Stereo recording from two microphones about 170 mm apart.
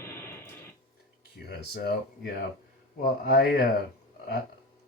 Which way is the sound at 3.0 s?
60° left (ahead or behind).